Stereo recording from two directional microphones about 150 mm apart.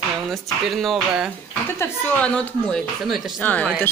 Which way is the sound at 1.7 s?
10° left (ahead or behind).